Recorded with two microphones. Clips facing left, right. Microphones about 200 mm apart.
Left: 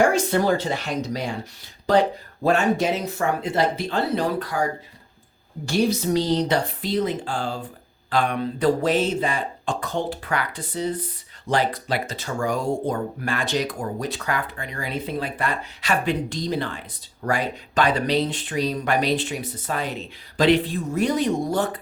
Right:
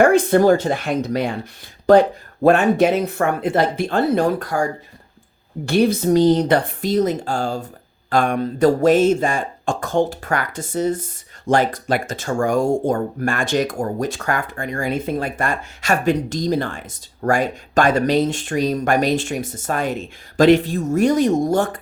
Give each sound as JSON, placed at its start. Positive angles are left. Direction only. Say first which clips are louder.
{"t": 0.0, "sound": "speech", "louder": "right 6 dB", "side_deg": -55}
{"t": 5.6, "sound": "speech", "louder": "right 5 dB", "side_deg": -60}